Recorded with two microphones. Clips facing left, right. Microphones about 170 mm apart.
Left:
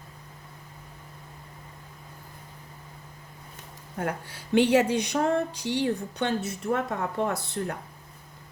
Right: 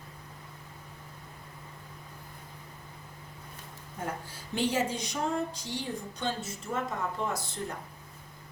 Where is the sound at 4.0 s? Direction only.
70° left (ahead or behind).